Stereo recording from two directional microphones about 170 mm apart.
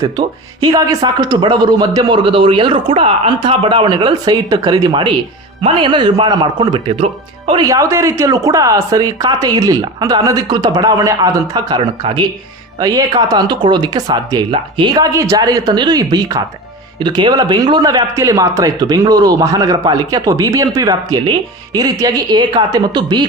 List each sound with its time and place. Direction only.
0.0 s speech: 25° right (ahead or behind)